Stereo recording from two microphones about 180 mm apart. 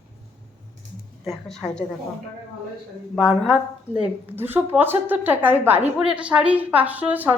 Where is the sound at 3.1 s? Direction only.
Centre (ahead or behind).